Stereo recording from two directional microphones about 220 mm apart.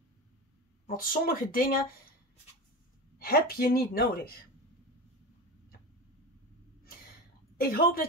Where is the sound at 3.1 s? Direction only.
45° left (ahead or behind).